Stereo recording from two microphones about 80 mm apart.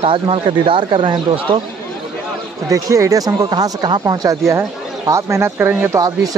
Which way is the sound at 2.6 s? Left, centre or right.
Right.